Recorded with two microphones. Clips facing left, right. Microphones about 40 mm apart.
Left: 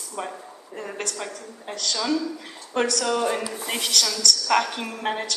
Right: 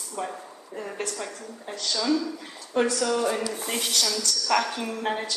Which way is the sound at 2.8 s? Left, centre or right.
Left.